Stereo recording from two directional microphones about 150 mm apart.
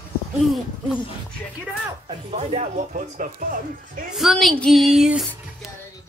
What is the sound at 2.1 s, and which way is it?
Speech, 40° right (ahead or behind).